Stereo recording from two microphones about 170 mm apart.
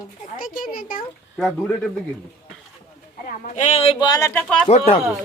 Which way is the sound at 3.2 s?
40° left (ahead or behind).